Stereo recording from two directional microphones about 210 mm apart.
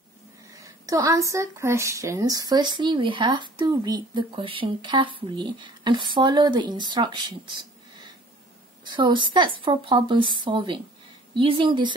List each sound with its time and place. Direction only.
0.8 s a woman's voice: 15° right (ahead or behind)
8.8 s speech: 20° right (ahead or behind)